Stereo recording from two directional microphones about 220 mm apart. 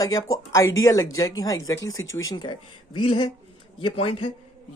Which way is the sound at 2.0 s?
65° left (ahead or behind).